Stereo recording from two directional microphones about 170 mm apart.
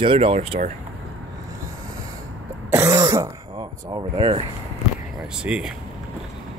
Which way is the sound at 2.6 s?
15° right (ahead or behind).